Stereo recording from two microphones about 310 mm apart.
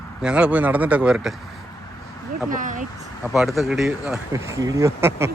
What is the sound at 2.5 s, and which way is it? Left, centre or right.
Speech, right.